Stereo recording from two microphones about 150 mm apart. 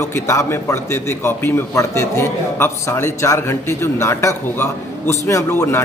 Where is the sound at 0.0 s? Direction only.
20° left (ahead or behind).